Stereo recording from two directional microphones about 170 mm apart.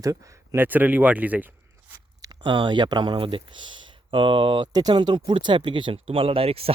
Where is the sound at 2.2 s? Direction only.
25° right (ahead or behind).